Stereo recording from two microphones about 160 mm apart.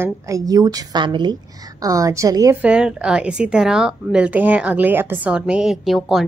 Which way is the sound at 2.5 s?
5° right (ahead or behind).